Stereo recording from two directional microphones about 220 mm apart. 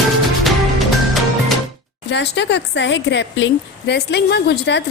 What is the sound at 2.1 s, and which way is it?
A woman's voice, 50° left (ahead or behind).